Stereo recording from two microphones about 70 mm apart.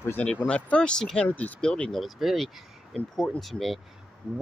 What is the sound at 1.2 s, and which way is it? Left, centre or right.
Speech, left.